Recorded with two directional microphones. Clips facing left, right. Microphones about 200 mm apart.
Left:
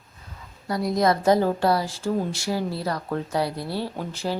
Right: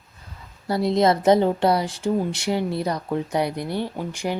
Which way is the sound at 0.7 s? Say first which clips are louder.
Right 3 dB; 25° right (ahead or behind).